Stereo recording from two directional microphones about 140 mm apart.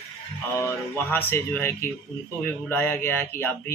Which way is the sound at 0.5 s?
15° left (ahead or behind).